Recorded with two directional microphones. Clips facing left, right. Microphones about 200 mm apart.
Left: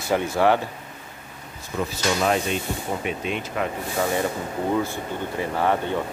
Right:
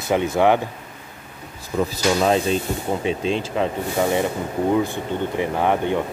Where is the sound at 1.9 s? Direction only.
30° right (ahead or behind); by 5.9 s 15° right (ahead or behind).